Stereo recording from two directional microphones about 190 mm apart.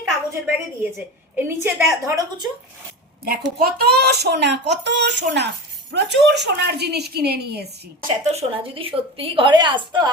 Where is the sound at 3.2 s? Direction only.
55° right (ahead or behind).